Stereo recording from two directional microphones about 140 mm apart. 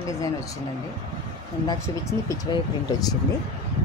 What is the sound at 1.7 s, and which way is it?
Speech, 20° left (ahead or behind).